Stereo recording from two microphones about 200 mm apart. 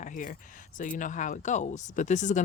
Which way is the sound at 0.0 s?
40° left (ahead or behind).